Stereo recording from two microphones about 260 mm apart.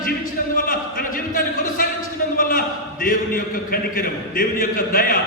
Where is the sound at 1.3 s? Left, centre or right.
Left.